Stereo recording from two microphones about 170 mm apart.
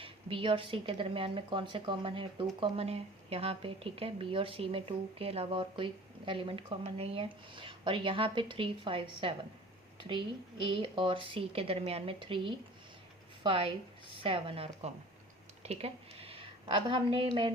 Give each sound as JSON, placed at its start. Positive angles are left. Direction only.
{"t": 0.0, "sound": "a woman's voice", "side_deg": -30}